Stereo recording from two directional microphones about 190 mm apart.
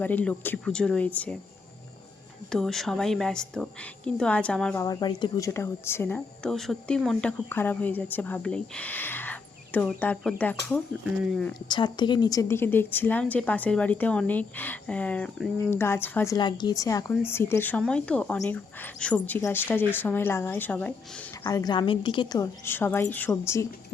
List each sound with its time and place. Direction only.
0.0 s speech: 10° left (ahead or behind)
2.5 s a woman's voice: centre (ahead or behind)
4.8 s speech: 20° left (ahead or behind)
11.2 s a woman's voice: centre (ahead or behind)
11.7 s speech: 25° left (ahead or behind); by 21.2 s 10° left (ahead or behind)
21.4 s speech: 20° left (ahead or behind)